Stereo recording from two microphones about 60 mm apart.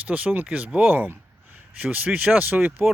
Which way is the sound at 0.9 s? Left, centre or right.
Right.